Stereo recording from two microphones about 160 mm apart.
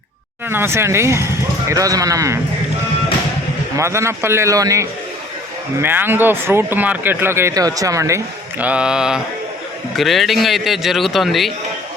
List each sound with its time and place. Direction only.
0.4 s speech: 15° right (ahead or behind)
3.8 s a man's voice: 15° right (ahead or behind); by 11.5 s centre (ahead or behind)